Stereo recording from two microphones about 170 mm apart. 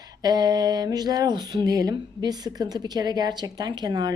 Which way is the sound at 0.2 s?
25° right (ahead or behind).